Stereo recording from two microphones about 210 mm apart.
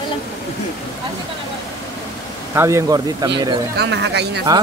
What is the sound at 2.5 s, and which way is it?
Speech, 15° right (ahead or behind).